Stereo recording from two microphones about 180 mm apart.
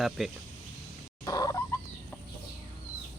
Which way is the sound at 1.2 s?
20° left (ahead or behind).